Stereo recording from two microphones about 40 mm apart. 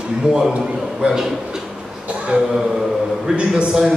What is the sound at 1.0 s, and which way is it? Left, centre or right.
Speech, right.